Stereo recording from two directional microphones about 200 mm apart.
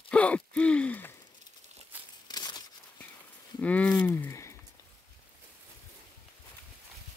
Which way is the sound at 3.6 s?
5° left (ahead or behind).